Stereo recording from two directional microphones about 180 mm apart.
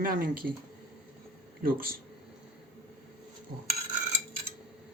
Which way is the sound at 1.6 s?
55° right (ahead or behind).